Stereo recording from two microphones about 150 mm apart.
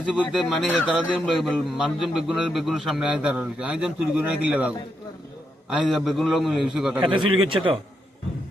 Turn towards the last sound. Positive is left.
turn(degrees=-35)  # may be behind; listen again after turning